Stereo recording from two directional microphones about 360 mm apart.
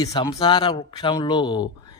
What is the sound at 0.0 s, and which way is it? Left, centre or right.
Speech, centre.